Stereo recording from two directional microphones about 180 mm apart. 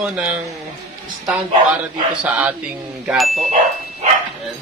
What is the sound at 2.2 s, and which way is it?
Speech, 10° right (ahead or behind).